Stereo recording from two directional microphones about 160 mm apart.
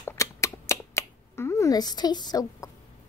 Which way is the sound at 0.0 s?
15° left (ahead or behind).